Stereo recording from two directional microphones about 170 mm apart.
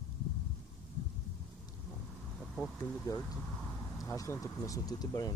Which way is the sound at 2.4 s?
5° left (ahead or behind).